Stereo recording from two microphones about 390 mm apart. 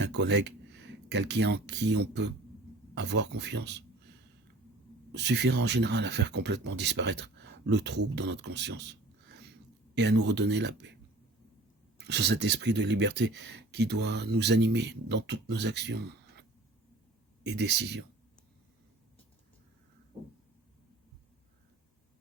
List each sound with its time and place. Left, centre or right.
0.0 s speech: right
5.1 s speech: right
11.9 s speech: right
17.4 s speech: right